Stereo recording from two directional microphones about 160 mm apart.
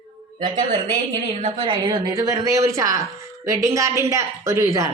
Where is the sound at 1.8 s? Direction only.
25° right (ahead or behind).